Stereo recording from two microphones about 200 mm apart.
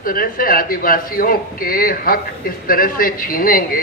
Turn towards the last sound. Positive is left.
turn(degrees=45)  # may be behind; listen again after turning